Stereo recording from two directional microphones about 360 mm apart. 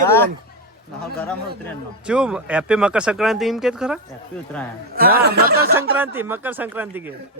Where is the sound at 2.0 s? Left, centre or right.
Centre.